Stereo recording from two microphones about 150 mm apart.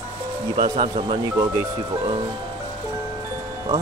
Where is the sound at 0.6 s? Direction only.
45° right (ahead or behind).